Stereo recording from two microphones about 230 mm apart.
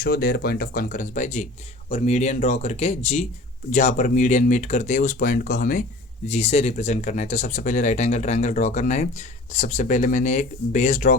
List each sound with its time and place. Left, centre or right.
0.0 s speech: left